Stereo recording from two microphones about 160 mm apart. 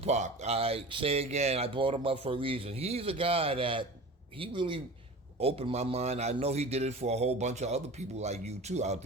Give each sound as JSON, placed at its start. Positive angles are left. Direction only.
{"t": 0.0, "sound": "speech", "side_deg": -45}